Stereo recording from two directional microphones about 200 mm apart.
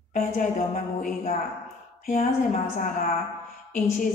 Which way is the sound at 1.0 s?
40° left (ahead or behind).